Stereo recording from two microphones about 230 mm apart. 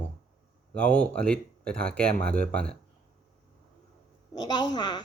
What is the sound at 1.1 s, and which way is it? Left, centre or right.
Speech, centre.